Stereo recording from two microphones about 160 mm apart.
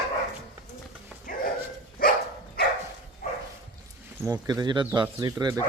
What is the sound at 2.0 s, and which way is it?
Dog, 60° left (ahead or behind).